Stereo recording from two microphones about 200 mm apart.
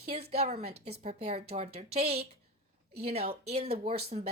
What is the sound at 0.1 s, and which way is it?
A woman's voice, 30° right (ahead or behind).